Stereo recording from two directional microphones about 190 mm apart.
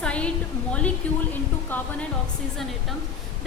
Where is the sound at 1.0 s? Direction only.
5° left (ahead or behind).